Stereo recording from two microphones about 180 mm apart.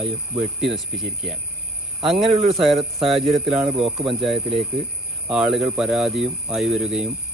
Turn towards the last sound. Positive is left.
turn(degrees=-5)  # may be behind; listen again after turning